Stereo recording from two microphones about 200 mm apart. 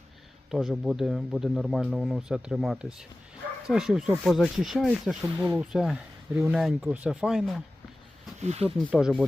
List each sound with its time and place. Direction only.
0.5 s speech: centre (ahead or behind)
8.4 s speech: 35° right (ahead or behind)
8.9 s speech: centre (ahead or behind)